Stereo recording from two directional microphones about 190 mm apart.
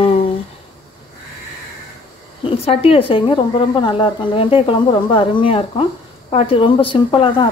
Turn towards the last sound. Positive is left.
turn(degrees=25)  # may be behind; listen again after turning